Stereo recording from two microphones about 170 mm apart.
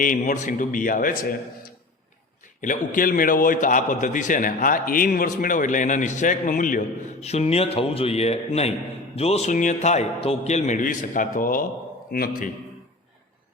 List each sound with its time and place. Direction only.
0.0 s a man's voice: 50° left (ahead or behind)
2.6 s a man's voice: 50° left (ahead or behind)
12.1 s a man's voice: 65° left (ahead or behind)